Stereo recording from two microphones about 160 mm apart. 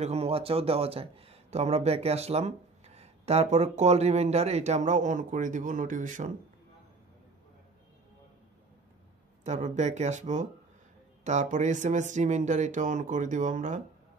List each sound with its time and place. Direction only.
0.0 s speech: 40° right (ahead or behind)
9.4 s speech: 50° right (ahead or behind)